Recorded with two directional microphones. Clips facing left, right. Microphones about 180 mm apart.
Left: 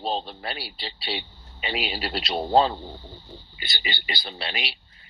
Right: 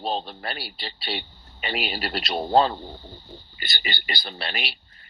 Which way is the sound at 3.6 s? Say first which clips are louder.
Right 1 dB; 50° right (ahead or behind).